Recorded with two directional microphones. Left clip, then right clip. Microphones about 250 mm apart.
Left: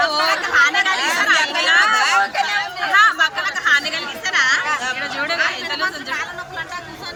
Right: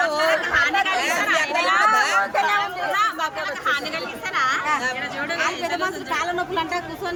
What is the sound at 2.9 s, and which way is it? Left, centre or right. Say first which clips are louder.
Chatter: left 11 dB; centre.